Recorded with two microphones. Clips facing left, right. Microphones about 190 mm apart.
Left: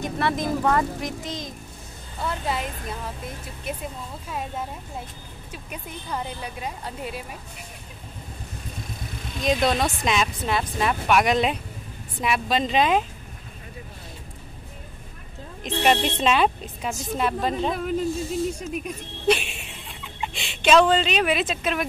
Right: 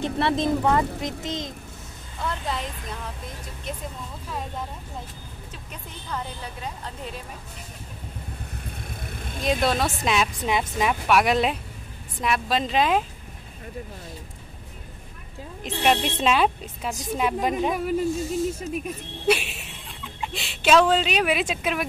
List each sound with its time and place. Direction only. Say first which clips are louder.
0.0 s speech: right 2 dB; 25° right (ahead or behind)
2.2 s a woman's voice: left 2 dB; 5° left (ahead or behind)
5.7 s a woman's voice: left 2 dB; 10° left (ahead or behind)
8.6 s vehicle: left 2 dB; 55° right (ahead or behind)
9.4 s speech: left 1 dB; 5° right (ahead or behind)
15.6 s speech: left 1 dB; centre (ahead or behind)
16.9 s speech: right 1 dB; 10° right (ahead or behind)